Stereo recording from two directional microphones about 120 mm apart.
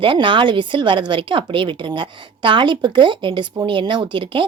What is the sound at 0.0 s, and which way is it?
Speech, 45° right (ahead or behind).